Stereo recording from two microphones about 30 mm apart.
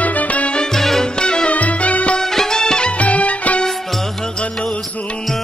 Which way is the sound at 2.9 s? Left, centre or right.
Left.